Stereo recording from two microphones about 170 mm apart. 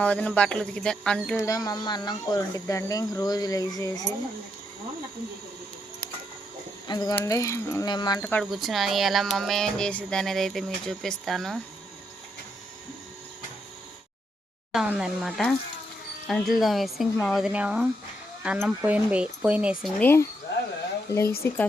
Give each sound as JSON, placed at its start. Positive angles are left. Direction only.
{"t": 0.0, "sound": "speech", "side_deg": 5}
{"t": 1.4, "sound": "speech", "side_deg": 20}
{"t": 6.8, "sound": "speech", "side_deg": 25}
{"t": 8.2, "sound": "speech", "side_deg": 10}
{"t": 14.7, "sound": "speech", "side_deg": -5}
{"t": 20.0, "sound": "speech", "side_deg": 10}